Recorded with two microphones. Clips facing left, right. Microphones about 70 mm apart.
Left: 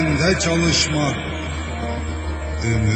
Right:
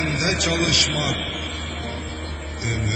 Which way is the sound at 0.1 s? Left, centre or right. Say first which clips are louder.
Left 6 dB; left.